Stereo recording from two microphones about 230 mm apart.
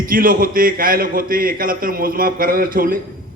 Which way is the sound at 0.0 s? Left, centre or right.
Right.